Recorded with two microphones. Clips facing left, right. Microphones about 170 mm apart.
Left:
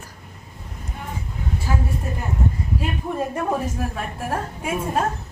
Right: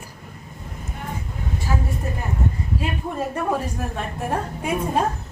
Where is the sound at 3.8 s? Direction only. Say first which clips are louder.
Even; 5° left (ahead or behind).